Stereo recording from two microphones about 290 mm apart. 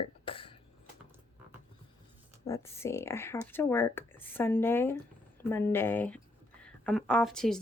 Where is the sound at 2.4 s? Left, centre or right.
Centre.